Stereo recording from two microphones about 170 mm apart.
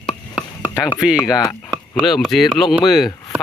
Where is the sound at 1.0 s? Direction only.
5° right (ahead or behind).